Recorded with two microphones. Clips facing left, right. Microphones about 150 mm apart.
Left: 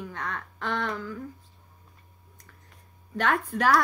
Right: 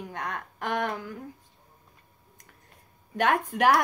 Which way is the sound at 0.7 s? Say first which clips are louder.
Right 1 dB; 45° right (ahead or behind).